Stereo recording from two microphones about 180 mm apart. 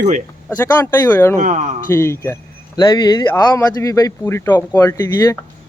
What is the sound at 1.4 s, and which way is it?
Speech, 45° right (ahead or behind).